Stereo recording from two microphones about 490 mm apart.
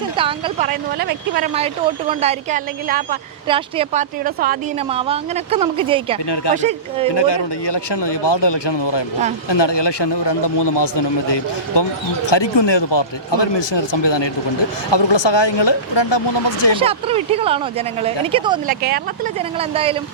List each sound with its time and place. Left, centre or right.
0.2 s speech: centre
6.3 s speech: left
6.6 s speech: centre
7.1 s a man's voice: left
16.8 s speech: centre